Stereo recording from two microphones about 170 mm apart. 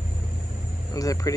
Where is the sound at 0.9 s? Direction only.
20° left (ahead or behind).